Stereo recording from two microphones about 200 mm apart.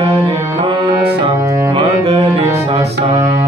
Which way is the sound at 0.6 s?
25° right (ahead or behind).